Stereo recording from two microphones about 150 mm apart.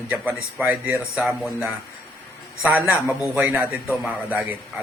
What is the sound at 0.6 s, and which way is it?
Speech, 15° right (ahead or behind).